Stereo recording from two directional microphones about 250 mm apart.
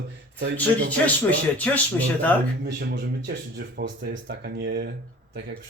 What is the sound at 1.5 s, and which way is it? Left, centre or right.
Speech, centre.